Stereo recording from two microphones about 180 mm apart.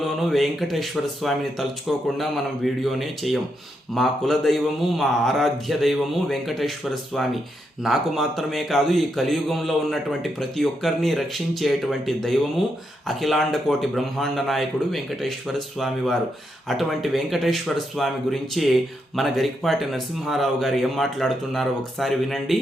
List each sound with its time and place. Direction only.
0.0 s a man's voice: centre (ahead or behind)